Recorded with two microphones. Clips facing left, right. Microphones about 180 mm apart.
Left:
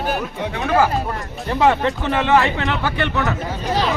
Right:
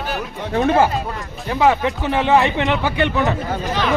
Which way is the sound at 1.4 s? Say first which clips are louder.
Even; centre (ahead or behind).